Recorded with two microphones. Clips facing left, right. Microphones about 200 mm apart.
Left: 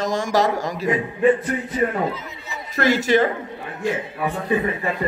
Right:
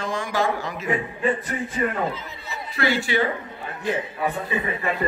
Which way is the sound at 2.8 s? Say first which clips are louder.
Left 5 dB; 40° left (ahead or behind).